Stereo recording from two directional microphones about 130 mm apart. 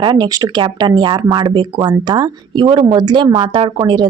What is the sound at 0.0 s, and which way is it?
Speech, 35° right (ahead or behind).